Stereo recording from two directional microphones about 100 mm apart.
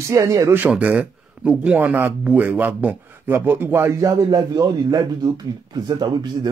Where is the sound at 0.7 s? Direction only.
15° right (ahead or behind).